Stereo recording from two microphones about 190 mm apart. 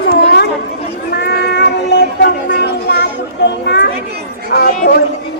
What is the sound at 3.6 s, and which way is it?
Chatter, 65° left (ahead or behind).